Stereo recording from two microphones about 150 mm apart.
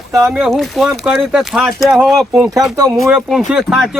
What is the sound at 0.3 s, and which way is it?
Speech, centre (ahead or behind).